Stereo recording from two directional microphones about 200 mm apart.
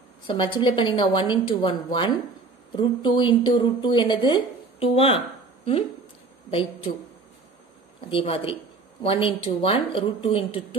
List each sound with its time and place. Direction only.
0.3 s speech: 25° left (ahead or behind)
6.5 s speech: 25° left (ahead or behind)
8.1 s speech: 25° left (ahead or behind)